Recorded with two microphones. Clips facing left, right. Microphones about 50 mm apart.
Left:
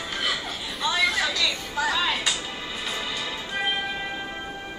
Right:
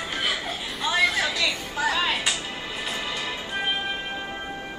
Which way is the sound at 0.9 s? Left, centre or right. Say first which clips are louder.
Right 1 dB; centre.